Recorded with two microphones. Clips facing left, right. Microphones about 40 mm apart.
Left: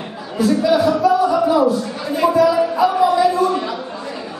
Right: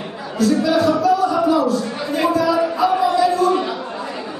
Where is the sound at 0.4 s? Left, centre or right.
Centre.